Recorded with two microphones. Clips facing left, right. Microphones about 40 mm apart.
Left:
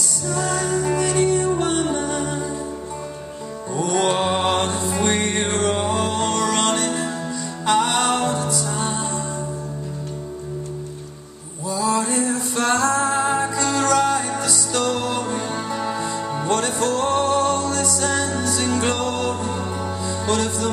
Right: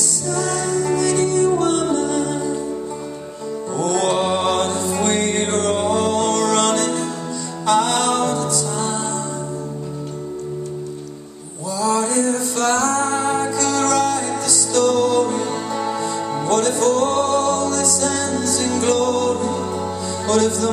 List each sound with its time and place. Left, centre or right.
0.3 s music: centre
3.7 s music: centre
11.7 s music: centre